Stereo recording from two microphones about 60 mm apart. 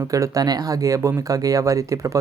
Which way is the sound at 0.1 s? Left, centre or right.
Right.